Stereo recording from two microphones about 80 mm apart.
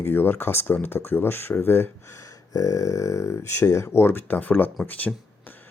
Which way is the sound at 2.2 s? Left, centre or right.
Left.